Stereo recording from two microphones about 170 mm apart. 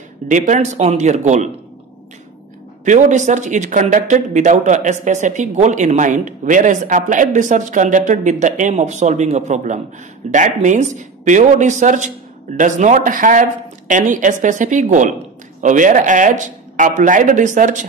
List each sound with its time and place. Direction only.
0.3 s speech: 45° right (ahead or behind)
2.8 s speech: 45° right (ahead or behind)